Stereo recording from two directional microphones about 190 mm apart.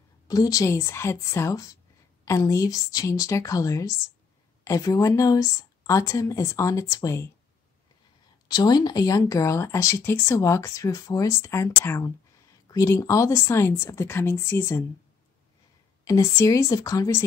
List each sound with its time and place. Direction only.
0.3 s speech: 20° left (ahead or behind)
8.5 s speech: 20° left (ahead or behind)
16.0 s speech: 15° left (ahead or behind)